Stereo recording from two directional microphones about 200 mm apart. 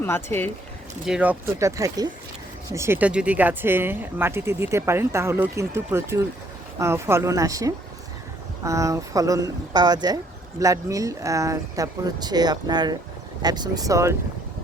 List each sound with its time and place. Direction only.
0.0 s speech: 10° left (ahead or behind)
1.0 s speech: 5° right (ahead or behind)